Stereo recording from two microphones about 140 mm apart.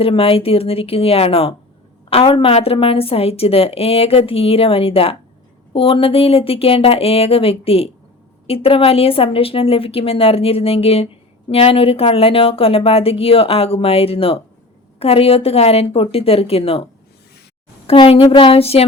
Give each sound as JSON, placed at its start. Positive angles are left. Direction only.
{"t": 0.0, "sound": "a woman's voice", "side_deg": 45}
{"t": 17.8, "sound": "a woman's voice", "side_deg": 40}